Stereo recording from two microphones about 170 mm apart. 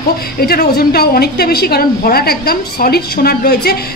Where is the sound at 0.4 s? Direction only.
65° left (ahead or behind).